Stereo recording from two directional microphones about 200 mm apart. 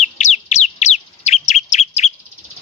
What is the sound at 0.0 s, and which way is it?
Bird, 35° left (ahead or behind).